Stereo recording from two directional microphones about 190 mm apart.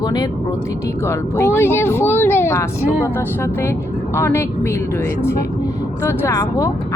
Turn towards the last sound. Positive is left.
turn(degrees=15)  # may be behind; listen again after turning